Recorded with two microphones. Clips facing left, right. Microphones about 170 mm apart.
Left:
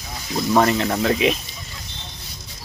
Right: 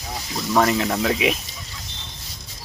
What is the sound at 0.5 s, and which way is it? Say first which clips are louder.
Speech: left 1 dB; centre (ahead or behind).